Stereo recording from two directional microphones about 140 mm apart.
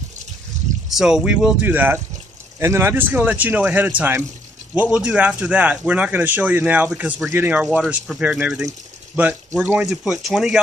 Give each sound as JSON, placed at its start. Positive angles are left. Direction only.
{"t": 0.8, "sound": "speech", "side_deg": -5}